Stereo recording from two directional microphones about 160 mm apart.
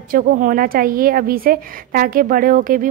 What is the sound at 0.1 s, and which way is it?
A woman's voice, 65° right (ahead or behind).